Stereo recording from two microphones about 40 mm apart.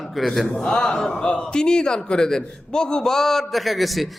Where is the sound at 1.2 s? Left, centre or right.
Left.